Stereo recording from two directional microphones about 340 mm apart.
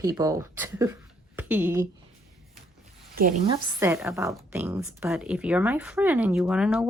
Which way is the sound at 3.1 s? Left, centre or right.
Right.